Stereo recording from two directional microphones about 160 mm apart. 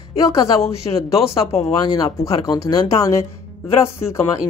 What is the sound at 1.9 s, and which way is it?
Speech, 25° left (ahead or behind).